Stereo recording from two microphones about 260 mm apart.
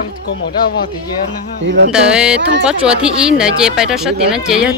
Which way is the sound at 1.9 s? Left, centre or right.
Centre.